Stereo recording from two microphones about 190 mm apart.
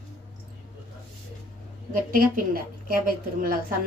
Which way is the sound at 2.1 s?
50° right (ahead or behind).